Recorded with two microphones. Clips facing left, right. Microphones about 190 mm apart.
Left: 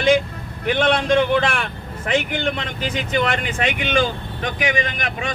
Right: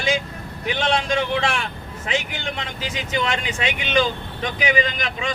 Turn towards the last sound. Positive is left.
turn(degrees=55)  # may be behind; listen again after turning